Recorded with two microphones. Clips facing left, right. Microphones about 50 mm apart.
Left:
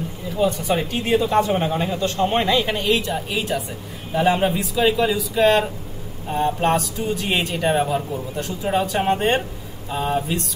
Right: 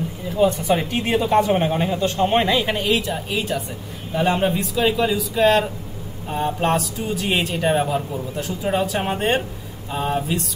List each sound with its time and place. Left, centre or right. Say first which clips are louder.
0.7 s speech: left 1 dB; centre
2.5 s a man's voice: even; centre